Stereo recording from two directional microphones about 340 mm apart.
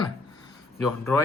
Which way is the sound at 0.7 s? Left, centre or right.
Centre.